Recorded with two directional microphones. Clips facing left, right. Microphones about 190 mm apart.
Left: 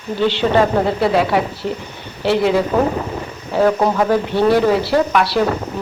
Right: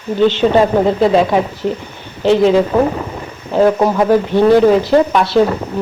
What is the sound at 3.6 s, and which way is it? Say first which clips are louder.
Speech: right 3 dB; 10° right (ahead or behind).